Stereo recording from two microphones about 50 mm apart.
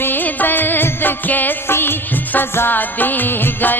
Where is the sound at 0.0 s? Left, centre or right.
Left.